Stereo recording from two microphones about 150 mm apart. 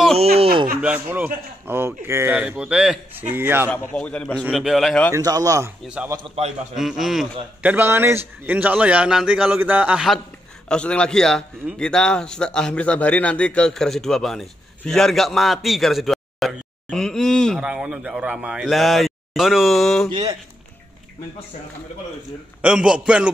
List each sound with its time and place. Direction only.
0.7 s speech: 10° right (ahead or behind)
3.7 s a man's voice: 10° left (ahead or behind)
5.1 s a man's voice: 25° right (ahead or behind)
6.2 s a man's voice: 45° right (ahead or behind)
6.7 s a man's voice: centre (ahead or behind)
7.6 s a man's voice: 15° right (ahead or behind); by 17.6 s 5° left (ahead or behind)
17.6 s a man's voice: 5° right (ahead or behind)
20.1 s speech: 30° right (ahead or behind)
22.6 s speech: 5° right (ahead or behind)